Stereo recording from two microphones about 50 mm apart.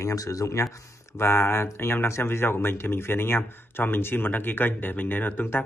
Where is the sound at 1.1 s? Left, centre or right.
Left.